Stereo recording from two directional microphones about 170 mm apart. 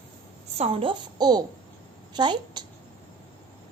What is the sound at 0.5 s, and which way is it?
A woman's voice, 35° right (ahead or behind).